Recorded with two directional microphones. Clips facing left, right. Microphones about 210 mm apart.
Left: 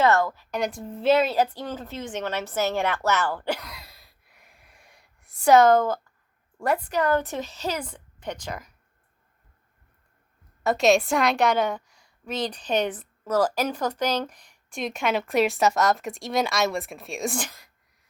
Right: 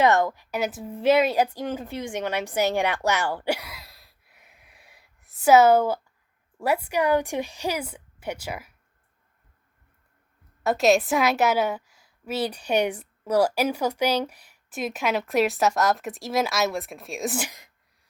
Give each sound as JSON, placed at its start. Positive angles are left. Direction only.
{"t": 0.0, "sound": "a woman's voice", "side_deg": -20}
{"t": 0.5, "sound": "a woman's voice", "side_deg": -5}
{"t": 10.6, "sound": "a woman's voice", "side_deg": 0}